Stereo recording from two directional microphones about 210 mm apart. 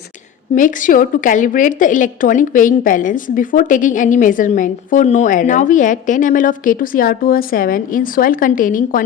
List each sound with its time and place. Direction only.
0.5 s a woman's voice: 40° left (ahead or behind)